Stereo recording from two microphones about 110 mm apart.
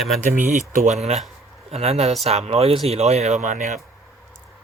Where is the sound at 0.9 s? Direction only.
80° right.